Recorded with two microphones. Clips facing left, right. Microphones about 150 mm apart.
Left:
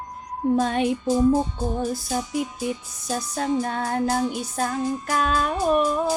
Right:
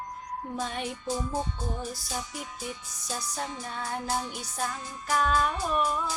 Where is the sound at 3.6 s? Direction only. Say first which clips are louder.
Left 11 dB; 65° left (ahead or behind).